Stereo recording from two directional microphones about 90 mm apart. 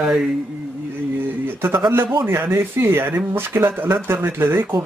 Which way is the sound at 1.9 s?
25° right (ahead or behind).